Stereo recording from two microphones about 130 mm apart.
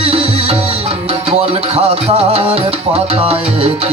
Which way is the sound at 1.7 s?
50° right (ahead or behind).